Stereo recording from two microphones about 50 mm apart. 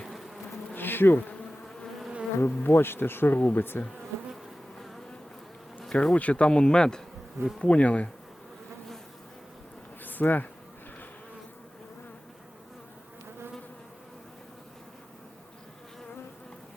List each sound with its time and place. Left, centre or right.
0.8 s bee: left
2.4 s bee: left
3.3 s speech: left
3.6 s bee: left
5.9 s bee: centre
6.1 s speech: left
7.6 s speech: left
10.0 s bee: left